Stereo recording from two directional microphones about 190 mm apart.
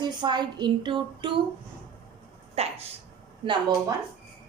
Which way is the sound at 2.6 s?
35° right (ahead or behind).